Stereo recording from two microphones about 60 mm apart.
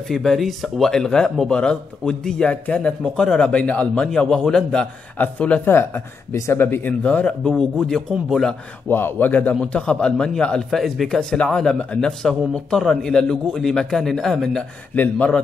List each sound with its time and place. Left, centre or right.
0.1 s a man's voice: centre
5.2 s speech: left
5.7 s a man's voice: left
6.3 s speech: left
6.6 s a man's voice: left
6.9 s speech: left
8.8 s a man's voice: left; by 14.6 s centre
15.0 s speech: left